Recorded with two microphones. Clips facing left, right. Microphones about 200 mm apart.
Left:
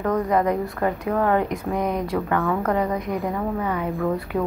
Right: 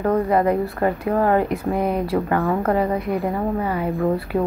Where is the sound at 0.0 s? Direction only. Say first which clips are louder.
Right 3 dB; 30° right (ahead or behind).